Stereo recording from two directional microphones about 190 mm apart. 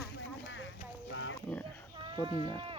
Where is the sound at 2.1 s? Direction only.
25° right (ahead or behind).